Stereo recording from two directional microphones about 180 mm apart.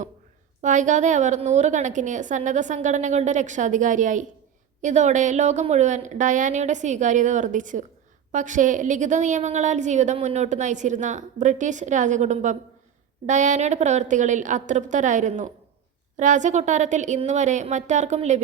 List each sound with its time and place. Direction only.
0.6 s a woman's voice: 45° right (ahead or behind)